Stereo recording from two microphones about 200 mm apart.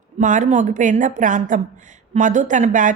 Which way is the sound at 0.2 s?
40° right (ahead or behind).